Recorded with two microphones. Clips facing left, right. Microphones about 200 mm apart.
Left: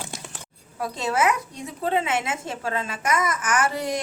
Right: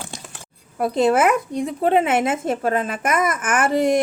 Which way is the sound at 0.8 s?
55° right (ahead or behind).